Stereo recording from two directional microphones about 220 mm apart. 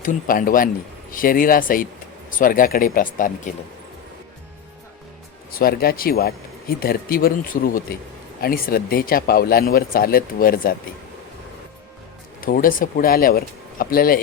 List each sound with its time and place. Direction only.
0.0 s speech: 40° left (ahead or behind)
5.5 s speech: 45° left (ahead or behind)
12.4 s speech: 40° left (ahead or behind)